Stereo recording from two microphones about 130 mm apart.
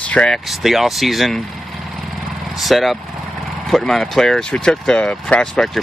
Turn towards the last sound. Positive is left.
turn(degrees=0)  # may be behind; listen again after turning